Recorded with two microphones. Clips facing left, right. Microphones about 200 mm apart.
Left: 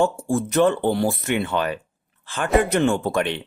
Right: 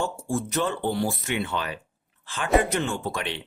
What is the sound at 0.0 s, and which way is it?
Speech, 55° left (ahead or behind).